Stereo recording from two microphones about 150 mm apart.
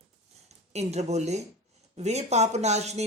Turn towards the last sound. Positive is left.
turn(degrees=-45)  # may be behind; listen again after turning